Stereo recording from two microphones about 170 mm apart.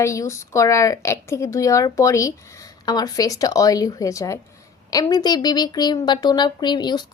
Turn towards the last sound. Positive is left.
turn(degrees=25)  # may be behind; listen again after turning